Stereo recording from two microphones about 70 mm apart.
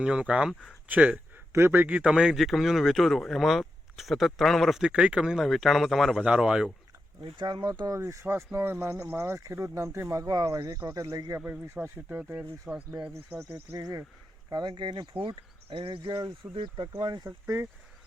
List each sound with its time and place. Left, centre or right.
0.0 s speech: centre
1.5 s speech: right; by 4.8 s centre
4.8 s speech: centre
6.2 s speech: centre
7.3 s speech: right
7.9 s speech: right
11.8 s speech: right
13.7 s speech: right
14.5 s speech: right
15.1 s speech: right
16.0 s speech: right
16.7 s speech: right
17.2 s speech: right